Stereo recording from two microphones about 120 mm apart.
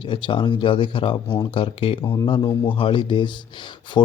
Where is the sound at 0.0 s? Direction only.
45° left (ahead or behind).